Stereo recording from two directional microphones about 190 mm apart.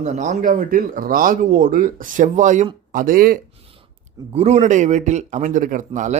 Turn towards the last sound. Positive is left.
turn(degrees=-40)  # may be behind; listen again after turning